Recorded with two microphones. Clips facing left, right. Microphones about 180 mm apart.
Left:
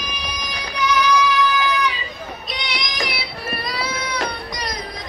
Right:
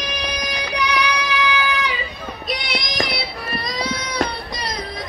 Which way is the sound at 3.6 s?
35° right (ahead or behind).